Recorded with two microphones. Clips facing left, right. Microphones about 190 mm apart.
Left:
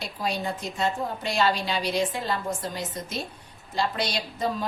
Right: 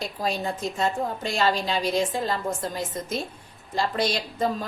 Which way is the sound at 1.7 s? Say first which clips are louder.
Right 2 dB; 45° right (ahead or behind).